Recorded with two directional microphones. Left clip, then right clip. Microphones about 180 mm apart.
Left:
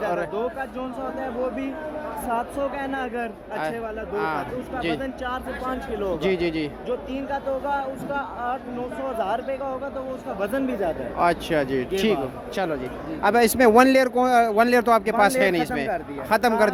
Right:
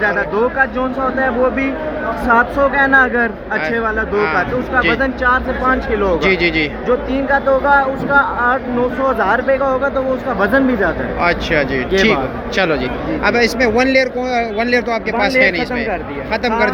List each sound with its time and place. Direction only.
0.0 s speech: 25° left (ahead or behind)
13.2 s speech: 40° left (ahead or behind)